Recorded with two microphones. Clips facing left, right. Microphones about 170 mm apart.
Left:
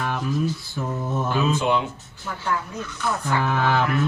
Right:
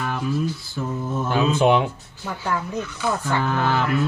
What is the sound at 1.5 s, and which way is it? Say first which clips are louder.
Speech: right 5 dB; 60° right (ahead or behind).